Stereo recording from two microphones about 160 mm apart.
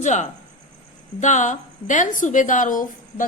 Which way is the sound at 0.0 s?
50° left (ahead or behind).